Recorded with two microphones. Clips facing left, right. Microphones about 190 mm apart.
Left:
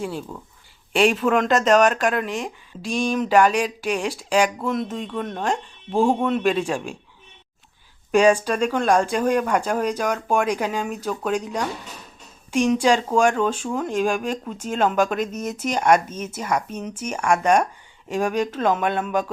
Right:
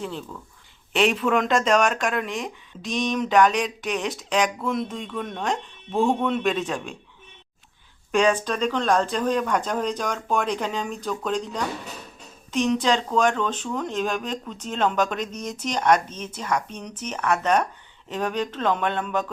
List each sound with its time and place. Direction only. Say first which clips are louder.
0.0 s speech: left 3 dB; 10° left (ahead or behind)
8.1 s a woman's voice: left 4 dB; 10° left (ahead or behind)